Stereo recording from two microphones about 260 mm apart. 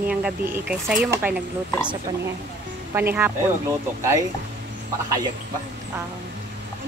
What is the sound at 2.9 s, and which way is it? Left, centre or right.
Speech, centre.